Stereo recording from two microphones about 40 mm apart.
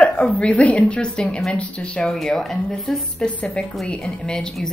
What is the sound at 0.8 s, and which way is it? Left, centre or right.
A woman's voice, left.